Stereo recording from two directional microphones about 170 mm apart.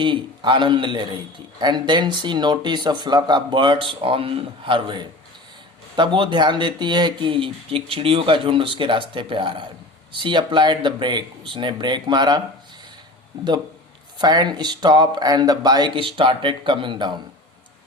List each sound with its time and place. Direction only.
0.0 s speech: 30° right (ahead or behind)
14.2 s speech: 25° right (ahead or behind)